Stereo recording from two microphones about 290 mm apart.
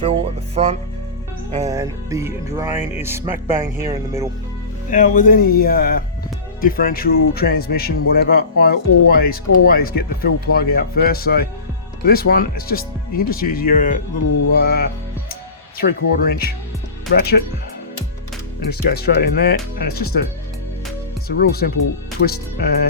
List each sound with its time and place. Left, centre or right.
0.0 s music: centre
4.9 s a man's voice: left
18.8 s a man's voice: left
21.2 s a man's voice: left